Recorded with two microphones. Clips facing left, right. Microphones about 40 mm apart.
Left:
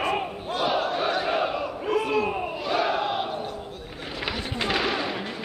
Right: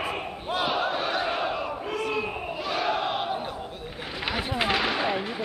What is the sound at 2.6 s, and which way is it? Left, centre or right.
Crowd, centre.